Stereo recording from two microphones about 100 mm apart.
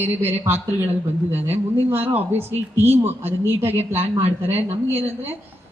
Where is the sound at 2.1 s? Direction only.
20° right (ahead or behind).